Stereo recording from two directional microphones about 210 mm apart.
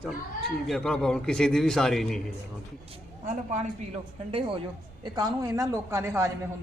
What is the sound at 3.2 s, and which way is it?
Speech, 35° right (ahead or behind).